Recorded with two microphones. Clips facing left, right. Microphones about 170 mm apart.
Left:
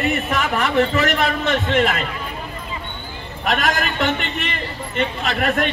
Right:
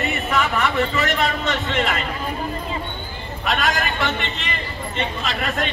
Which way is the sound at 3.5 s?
50° left (ahead or behind).